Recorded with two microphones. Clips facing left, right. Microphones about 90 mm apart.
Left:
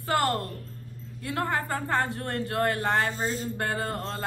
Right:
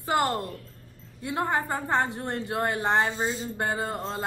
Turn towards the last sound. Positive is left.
turn(degrees=-20)  # may be behind; listen again after turning